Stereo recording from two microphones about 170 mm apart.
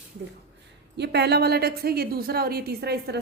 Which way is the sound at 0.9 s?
80° right.